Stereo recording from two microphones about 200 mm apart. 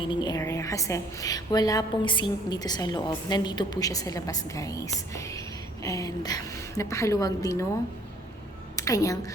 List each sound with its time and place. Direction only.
0.0 s a woman's voice: 25° left (ahead or behind)
8.7 s a woman's voice: 15° left (ahead or behind)